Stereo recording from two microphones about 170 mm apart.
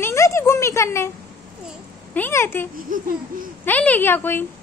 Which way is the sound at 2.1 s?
15° left (ahead or behind).